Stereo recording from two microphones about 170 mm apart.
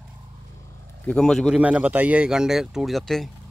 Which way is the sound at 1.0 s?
5° left (ahead or behind).